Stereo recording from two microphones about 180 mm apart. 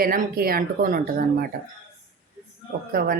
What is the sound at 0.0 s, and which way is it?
Speech, 55° right (ahead or behind).